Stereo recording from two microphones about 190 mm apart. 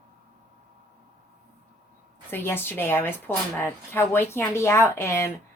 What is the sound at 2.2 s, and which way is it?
A woman's voice, 10° left (ahead or behind).